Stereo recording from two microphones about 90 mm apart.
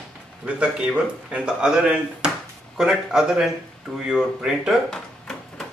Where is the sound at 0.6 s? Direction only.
10° right (ahead or behind).